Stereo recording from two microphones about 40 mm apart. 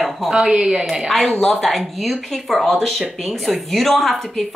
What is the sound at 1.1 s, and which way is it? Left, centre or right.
Speech, centre.